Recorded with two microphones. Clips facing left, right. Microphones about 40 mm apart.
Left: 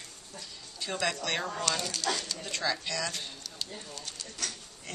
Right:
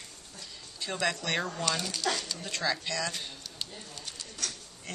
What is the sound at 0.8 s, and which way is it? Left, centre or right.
Speech, centre.